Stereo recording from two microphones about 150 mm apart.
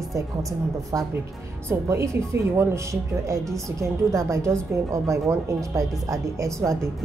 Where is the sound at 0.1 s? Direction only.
20° right (ahead or behind).